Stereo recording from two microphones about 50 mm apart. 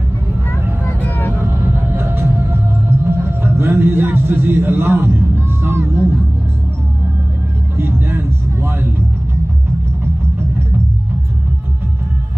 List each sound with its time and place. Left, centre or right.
1.0 s vehicle: left
1.4 s music: right
7.7 s vehicle: right